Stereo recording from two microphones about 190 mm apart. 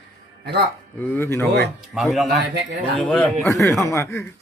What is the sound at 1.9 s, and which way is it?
Speech, centre (ahead or behind).